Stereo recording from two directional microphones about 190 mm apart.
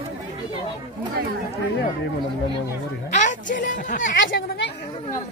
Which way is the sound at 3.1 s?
40° left (ahead or behind).